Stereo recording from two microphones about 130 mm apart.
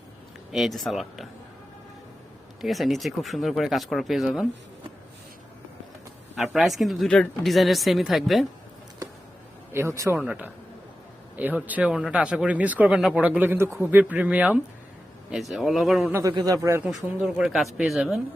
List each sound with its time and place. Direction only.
0.5 s speech: centre (ahead or behind)
2.6 s speech: centre (ahead or behind)
6.3 s speech: centre (ahead or behind)
9.7 s speech: 20° right (ahead or behind)
10.2 s speech: 10° right (ahead or behind)
13.7 s speech: centre (ahead or behind)
13.9 s speech: 10° right (ahead or behind)
16.3 s speech: 25° right (ahead or behind)
16.8 s speech: 10° right (ahead or behind)